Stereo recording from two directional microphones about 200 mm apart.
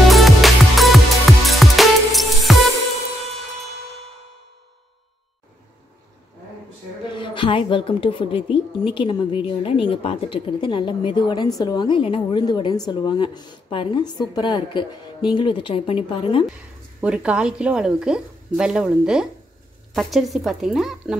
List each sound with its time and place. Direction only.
0.1 s music: centre (ahead or behind)
7.2 s a woman's voice: 25° left (ahead or behind)
17.0 s speech: 5° right (ahead or behind)